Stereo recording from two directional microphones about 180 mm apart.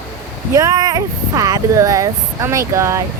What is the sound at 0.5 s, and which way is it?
Speech, 20° right (ahead or behind).